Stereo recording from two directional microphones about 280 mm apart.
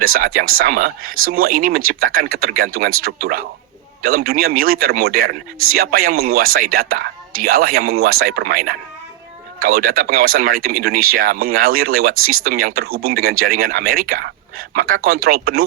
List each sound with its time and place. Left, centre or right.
0.0 s a man's voice: right